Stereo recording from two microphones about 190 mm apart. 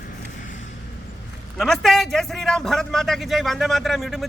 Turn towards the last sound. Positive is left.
turn(degrees=0)  # may be behind; listen again after turning